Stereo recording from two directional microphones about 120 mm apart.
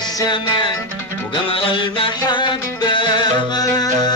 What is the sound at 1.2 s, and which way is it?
Music, 45° left (ahead or behind).